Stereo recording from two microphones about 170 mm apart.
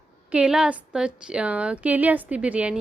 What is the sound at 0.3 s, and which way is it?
A woman's voice, 5° right (ahead or behind).